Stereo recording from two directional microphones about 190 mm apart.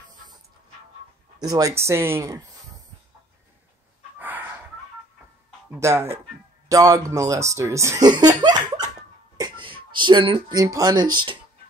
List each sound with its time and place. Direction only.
1.4 s speech: 20° right (ahead or behind)
4.2 s chicken: 10° right (ahead or behind)
5.7 s speech: 15° right (ahead or behind)